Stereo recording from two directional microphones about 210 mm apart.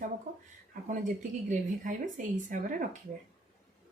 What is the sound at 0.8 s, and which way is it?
A woman's voice, 35° right (ahead or behind).